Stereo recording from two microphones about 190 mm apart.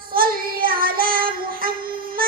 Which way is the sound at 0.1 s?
50° right (ahead or behind).